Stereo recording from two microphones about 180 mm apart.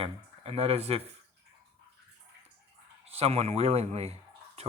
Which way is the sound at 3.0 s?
35° right (ahead or behind).